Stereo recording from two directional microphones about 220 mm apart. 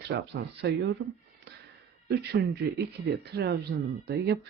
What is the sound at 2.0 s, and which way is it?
Speech, 45° right (ahead or behind).